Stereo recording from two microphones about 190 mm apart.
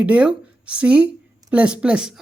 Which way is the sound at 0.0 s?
5° right (ahead or behind).